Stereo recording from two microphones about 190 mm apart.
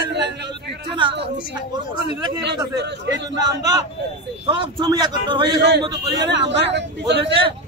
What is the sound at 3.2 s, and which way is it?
A man's voice, 20° right (ahead or behind).